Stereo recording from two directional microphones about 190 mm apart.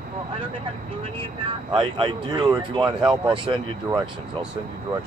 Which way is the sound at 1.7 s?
25° right (ahead or behind).